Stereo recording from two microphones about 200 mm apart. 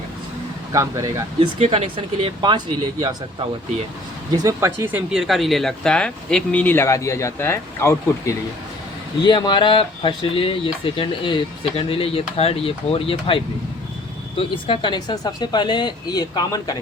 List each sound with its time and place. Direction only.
0.7 s speech: 15° right (ahead or behind)
1.4 s speech: 30° right (ahead or behind)
4.3 s speech: 15° right (ahead or behind); by 16.7 s 20° left (ahead or behind)